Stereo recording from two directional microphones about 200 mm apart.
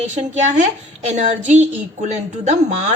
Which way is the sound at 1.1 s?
35° right (ahead or behind).